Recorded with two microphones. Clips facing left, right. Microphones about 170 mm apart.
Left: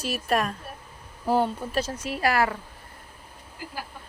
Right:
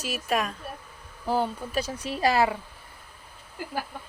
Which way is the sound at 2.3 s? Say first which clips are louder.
Right 1 dB; 20° right (ahead or behind).